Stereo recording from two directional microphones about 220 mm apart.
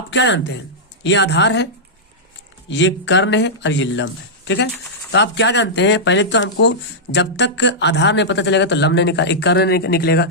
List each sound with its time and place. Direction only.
0.1 s speech: 55° left (ahead or behind)
2.6 s speech: 55° left (ahead or behind)